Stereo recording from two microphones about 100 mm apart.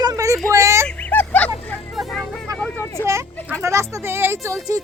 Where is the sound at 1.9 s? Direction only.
Centre (ahead or behind).